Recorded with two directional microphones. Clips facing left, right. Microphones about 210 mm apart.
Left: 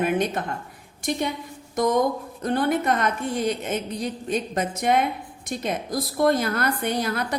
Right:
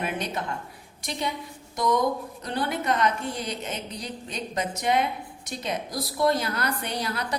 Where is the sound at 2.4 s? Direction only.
50° left (ahead or behind).